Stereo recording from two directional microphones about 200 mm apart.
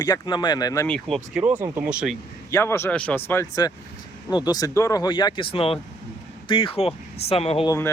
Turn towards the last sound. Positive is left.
turn(degrees=30)  # may be behind; listen again after turning